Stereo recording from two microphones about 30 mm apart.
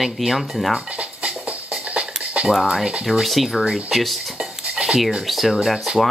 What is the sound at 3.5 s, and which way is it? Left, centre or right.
Speech, centre.